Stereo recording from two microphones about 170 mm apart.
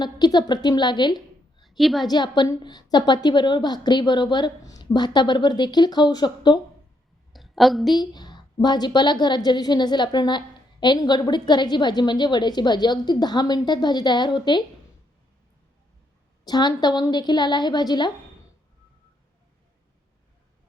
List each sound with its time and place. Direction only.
0.0 s a woman's voice: 25° left (ahead or behind)
1.6 s a woman's voice: centre (ahead or behind)
2.0 s a woman's voice: 25° left (ahead or behind)
7.3 s a woman's voice: centre (ahead or behind)
8.1 s a woman's voice: 25° left (ahead or behind)
16.4 s a woman's voice: 25° left (ahead or behind)